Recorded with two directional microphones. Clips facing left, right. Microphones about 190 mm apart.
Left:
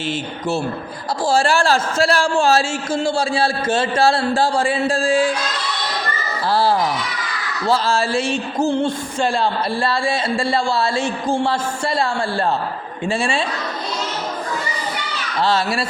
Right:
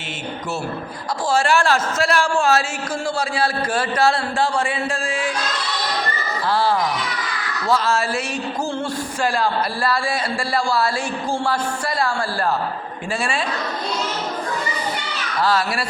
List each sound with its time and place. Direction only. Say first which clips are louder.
1.3 s a man's voice: left 1 dB; 30° left (ahead or behind)
6.5 s a man's voice: left 2 dB; 35° left (ahead or behind)
13.1 s speech: left 4 dB; 25° left (ahead or behind)
15.4 s speech: left 1 dB; 25° left (ahead or behind)